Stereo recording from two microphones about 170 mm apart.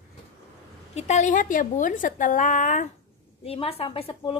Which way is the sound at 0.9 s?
45° left (ahead or behind).